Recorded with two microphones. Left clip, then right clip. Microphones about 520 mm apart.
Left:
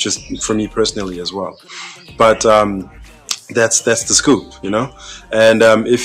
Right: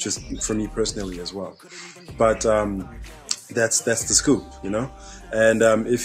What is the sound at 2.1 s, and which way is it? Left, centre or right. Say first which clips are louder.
Speech: left 9 dB; left.